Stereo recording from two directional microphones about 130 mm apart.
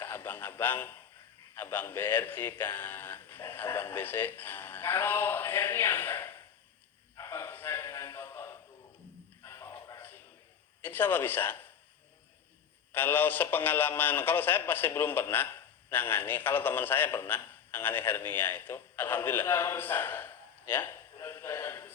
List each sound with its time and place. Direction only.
0.0 s radio: 15° left (ahead or behind)
1.5 s speech: 15° left (ahead or behind)
7.2 s a sound: 20° left (ahead or behind)
10.8 s speech: 15° left (ahead or behind)
12.9 s a man's voice: 15° left (ahead or behind)